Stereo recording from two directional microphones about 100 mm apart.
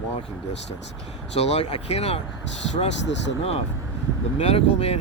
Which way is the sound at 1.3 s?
90° left.